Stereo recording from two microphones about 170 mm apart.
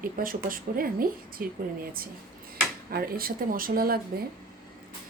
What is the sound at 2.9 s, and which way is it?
A woman's voice, 60° right (ahead or behind).